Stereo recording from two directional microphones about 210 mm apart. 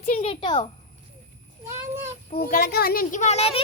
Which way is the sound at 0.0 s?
35° left (ahead or behind).